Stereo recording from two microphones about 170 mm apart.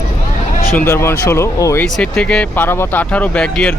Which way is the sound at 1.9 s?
5° left (ahead or behind).